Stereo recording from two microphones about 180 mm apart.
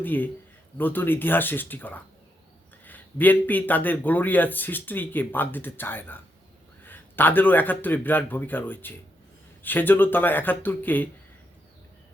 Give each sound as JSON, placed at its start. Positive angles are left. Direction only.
{"t": 0.0, "sound": "speech", "side_deg": 10}